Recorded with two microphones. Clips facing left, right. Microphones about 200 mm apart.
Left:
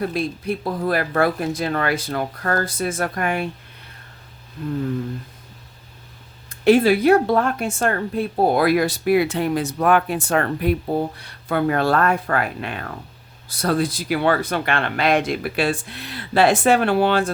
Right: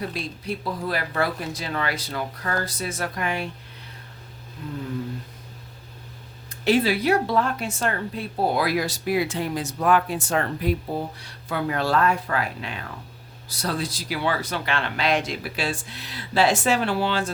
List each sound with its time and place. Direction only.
0.0 s speech: 55° left (ahead or behind)
6.5 s speech: 50° left (ahead or behind)